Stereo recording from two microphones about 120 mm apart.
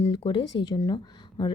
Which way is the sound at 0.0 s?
45° left (ahead or behind).